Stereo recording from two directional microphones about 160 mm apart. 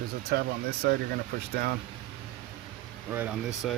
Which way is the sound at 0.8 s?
60° right (ahead or behind).